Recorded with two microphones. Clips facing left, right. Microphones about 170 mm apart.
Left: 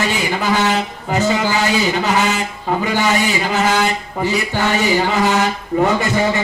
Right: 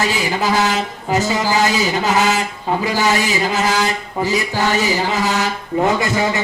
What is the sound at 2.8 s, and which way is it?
Speech, 40° right (ahead or behind).